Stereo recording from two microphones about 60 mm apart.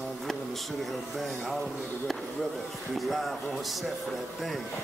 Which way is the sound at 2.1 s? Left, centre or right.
Centre.